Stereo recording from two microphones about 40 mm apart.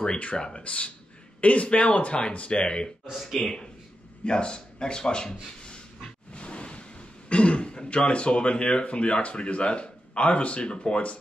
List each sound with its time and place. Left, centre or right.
0.0 s speech: left
3.1 s speech: centre
4.2 s speech: left